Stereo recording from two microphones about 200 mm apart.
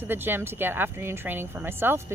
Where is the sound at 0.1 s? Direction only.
10° right (ahead or behind).